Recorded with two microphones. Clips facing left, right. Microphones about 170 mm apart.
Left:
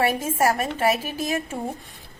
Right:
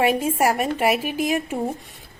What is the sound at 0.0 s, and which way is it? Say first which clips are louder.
A woman's voice: right 2 dB; 20° right (ahead or behind).